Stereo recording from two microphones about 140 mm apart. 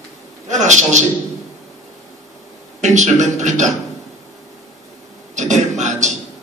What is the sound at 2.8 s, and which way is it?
Speech, 55° right (ahead or behind).